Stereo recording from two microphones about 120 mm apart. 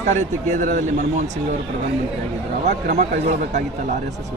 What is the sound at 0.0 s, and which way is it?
Speech, 85° right.